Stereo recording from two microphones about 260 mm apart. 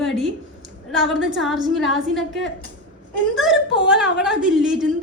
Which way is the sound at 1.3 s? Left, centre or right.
Centre.